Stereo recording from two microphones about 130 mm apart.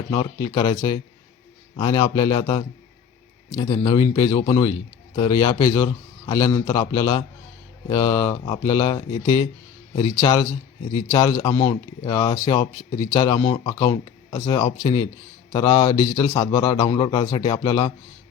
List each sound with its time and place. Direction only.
0.1 s speech: 35° left (ahead or behind)